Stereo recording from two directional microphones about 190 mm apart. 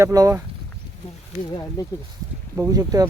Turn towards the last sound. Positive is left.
turn(degrees=-20)  # may be behind; listen again after turning